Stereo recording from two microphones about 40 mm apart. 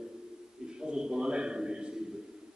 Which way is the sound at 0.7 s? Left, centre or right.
Right.